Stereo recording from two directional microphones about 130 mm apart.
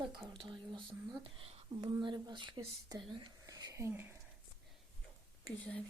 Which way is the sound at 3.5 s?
30° right (ahead or behind).